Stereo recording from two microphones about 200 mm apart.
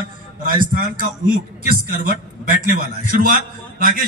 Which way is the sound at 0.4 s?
45° right (ahead or behind).